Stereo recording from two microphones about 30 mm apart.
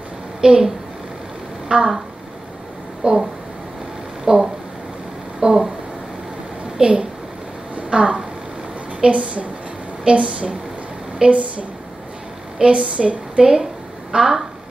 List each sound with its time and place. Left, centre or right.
0.4 s a woman's voice: right
1.7 s a woman's voice: right
3.0 s speech: right
4.2 s a sound: centre
6.8 s a child's voice: right
7.9 s a sound: right
9.1 s a woman's voice: right
12.5 s a woman's voice: right
13.4 s a woman's voice: right